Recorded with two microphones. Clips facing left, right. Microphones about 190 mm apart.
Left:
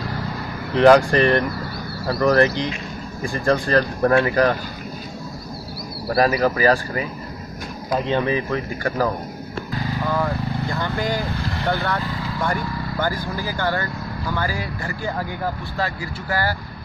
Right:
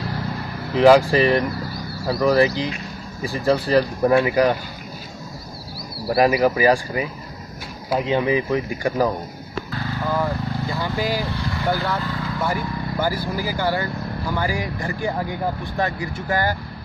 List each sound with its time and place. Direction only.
0.7 s speech: 5° right (ahead or behind)
6.0 s speech: 20° right (ahead or behind)
10.1 s speech: 5° right (ahead or behind)